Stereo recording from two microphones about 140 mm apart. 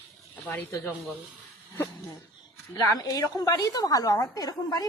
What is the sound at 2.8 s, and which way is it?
A woman's voice, 25° left (ahead or behind).